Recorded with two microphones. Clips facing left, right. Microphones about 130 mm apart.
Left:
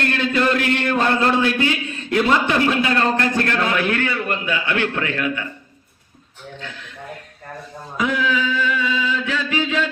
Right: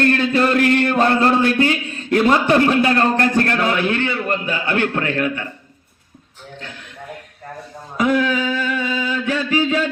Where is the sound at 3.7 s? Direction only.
25° right (ahead or behind).